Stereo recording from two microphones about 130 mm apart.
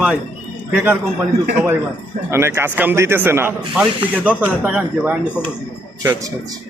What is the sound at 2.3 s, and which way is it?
Speech, 20° right (ahead or behind).